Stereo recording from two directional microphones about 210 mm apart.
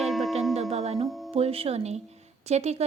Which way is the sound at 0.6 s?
30° right (ahead or behind).